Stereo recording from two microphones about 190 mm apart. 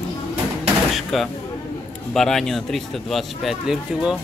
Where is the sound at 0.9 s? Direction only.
Centre (ahead or behind).